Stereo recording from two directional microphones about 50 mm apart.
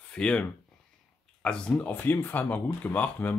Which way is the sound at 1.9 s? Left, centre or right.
Left.